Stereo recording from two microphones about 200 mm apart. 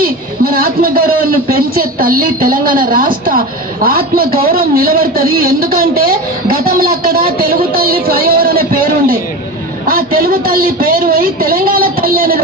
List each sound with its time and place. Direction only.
0.0 s a man's voice: 45° right (ahead or behind)